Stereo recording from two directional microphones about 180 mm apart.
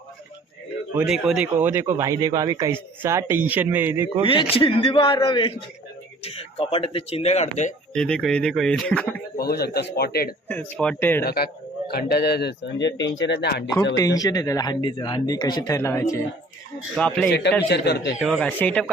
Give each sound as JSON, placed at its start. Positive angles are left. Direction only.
{"t": 0.9, "sound": "speech", "side_deg": -5}
{"t": 4.3, "sound": "speech", "side_deg": 30}
{"t": 7.9, "sound": "speech", "side_deg": 5}
{"t": 9.4, "sound": "speech", "side_deg": 60}
{"t": 10.5, "sound": "speech", "side_deg": 5}
{"t": 11.2, "sound": "speech", "side_deg": 60}
{"t": 13.9, "sound": "speech", "side_deg": 20}
{"t": 16.9, "sound": "speech", "side_deg": 5}
{"t": 17.7, "sound": "speech", "side_deg": 65}
{"t": 18.3, "sound": "speech", "side_deg": 10}